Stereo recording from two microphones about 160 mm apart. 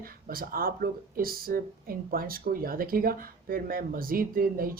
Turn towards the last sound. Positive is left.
turn(degrees=-65)  # may be behind; listen again after turning